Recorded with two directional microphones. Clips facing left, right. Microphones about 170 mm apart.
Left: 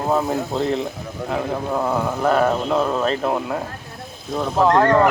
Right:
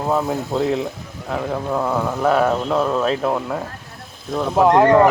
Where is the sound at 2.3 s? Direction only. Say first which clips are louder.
Even; centre (ahead or behind).